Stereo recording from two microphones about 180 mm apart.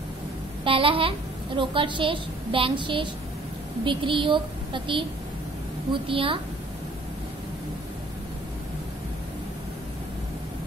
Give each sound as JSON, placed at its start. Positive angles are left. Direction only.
{"t": 0.7, "sound": "a woman's voice", "side_deg": -30}
{"t": 6.0, "sound": "a woman's voice", "side_deg": -30}